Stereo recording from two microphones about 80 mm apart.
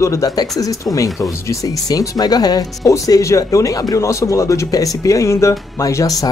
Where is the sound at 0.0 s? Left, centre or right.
Left.